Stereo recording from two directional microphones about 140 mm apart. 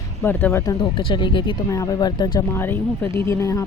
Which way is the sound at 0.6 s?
35° left (ahead or behind).